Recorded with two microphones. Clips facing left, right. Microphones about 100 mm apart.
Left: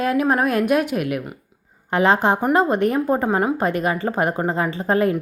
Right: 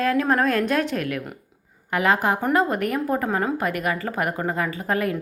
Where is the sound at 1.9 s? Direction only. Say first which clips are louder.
Left 4 dB; 30° left (ahead or behind).